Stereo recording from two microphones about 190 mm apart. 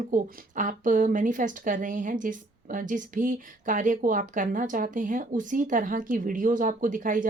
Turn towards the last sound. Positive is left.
turn(degrees=-45)  # may be behind; listen again after turning